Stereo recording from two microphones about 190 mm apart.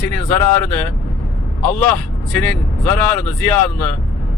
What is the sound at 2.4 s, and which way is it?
Speech, 10° left (ahead or behind).